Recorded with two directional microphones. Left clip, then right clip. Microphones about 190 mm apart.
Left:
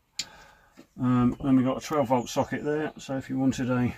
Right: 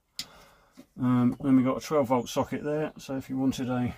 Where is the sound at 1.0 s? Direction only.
35° right (ahead or behind).